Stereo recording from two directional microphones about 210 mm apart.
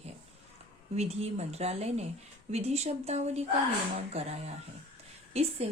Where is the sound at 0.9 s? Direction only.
30° right (ahead or behind).